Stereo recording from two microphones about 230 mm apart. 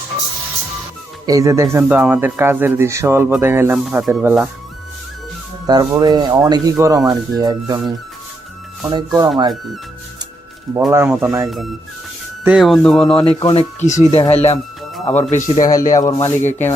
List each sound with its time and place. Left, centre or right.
1.3 s speech: centre
5.6 s speech: centre
10.8 s speech: centre
13.4 s speech: left
15.0 s speech: centre
15.3 s speech: left
15.9 s speech: centre